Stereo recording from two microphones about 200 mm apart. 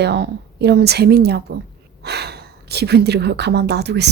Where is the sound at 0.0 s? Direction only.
55° right (ahead or behind).